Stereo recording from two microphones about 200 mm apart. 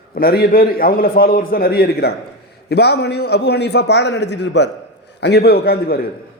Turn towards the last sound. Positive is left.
turn(degrees=50)  # may be behind; listen again after turning